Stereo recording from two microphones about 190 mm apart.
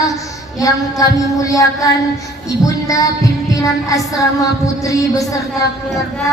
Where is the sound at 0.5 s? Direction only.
20° left (ahead or behind).